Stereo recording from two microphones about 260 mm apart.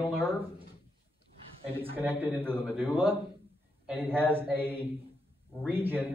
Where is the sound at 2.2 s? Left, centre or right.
Centre.